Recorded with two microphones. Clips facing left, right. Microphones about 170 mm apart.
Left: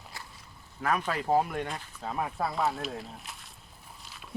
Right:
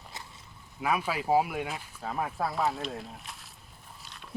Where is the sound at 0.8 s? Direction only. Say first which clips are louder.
Even; 10° right (ahead or behind).